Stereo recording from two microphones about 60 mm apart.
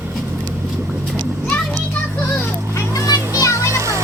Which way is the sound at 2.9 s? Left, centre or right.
Left.